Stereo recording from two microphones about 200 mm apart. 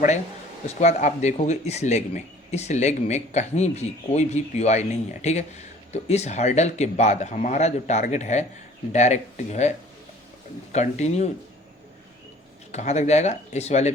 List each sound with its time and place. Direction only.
0.7 s speech: 35° left (ahead or behind)
12.7 s speech: 35° left (ahead or behind)